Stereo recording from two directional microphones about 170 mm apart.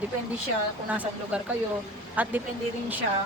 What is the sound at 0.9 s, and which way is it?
A woman's voice, 10° right (ahead or behind).